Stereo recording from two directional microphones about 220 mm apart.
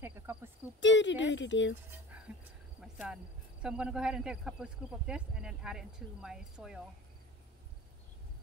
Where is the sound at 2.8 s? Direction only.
Centre (ahead or behind).